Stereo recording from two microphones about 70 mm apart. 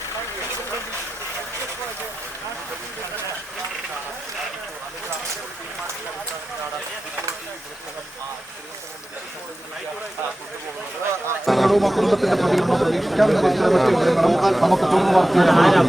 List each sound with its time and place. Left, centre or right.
11.4 s speech: centre